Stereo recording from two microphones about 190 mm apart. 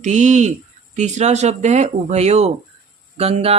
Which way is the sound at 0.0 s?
40° right (ahead or behind).